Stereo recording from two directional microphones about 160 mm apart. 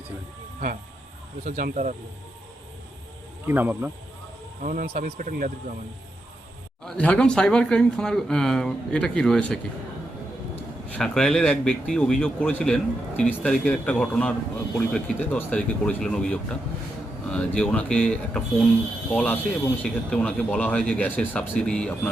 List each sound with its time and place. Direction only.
1.5 s speech: 50° right (ahead or behind)
3.4 s speech: 10° right (ahead or behind)
4.6 s speech: 55° right (ahead or behind)
6.8 s speech: 5° left (ahead or behind)
10.9 s speech: 5° left (ahead or behind)